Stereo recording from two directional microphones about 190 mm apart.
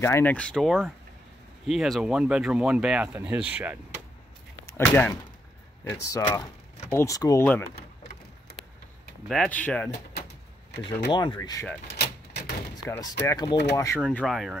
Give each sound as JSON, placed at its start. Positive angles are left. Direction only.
{"t": 0.0, "sound": "speech", "side_deg": 10}
{"t": 4.6, "sound": "speech", "side_deg": 10}
{"t": 9.3, "sound": "speech", "side_deg": 5}
{"t": 11.1, "sound": "speech", "side_deg": 20}
{"t": 12.0, "sound": "typewriter", "side_deg": 60}
{"t": 12.7, "sound": "speech", "side_deg": 20}
{"t": 14.1, "sound": "speech", "side_deg": 0}